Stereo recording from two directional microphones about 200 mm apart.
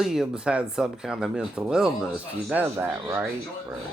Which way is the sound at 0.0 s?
Centre (ahead or behind).